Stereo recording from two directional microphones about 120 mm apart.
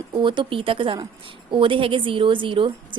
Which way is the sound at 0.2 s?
45° right (ahead or behind).